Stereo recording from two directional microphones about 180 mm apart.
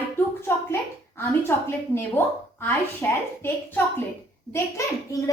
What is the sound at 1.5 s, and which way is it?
A child's voice, 10° left (ahead or behind).